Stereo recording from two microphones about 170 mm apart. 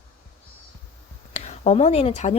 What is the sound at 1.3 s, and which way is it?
Speech, 40° left (ahead or behind).